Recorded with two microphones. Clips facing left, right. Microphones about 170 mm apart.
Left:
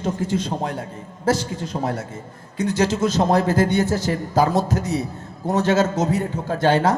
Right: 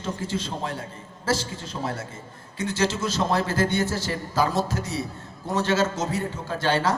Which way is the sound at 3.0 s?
45° left (ahead or behind).